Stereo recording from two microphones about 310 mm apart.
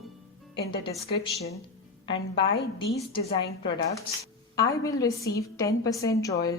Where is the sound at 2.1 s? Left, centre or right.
Centre.